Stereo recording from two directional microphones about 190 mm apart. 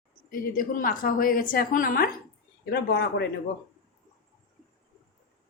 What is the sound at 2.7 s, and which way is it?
Speech, 60° left (ahead or behind).